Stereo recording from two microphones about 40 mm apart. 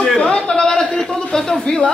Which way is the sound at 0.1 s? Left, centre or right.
Left.